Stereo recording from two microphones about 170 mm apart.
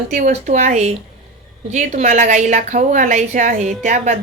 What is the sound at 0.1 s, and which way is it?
A woman's voice, 50° right (ahead or behind).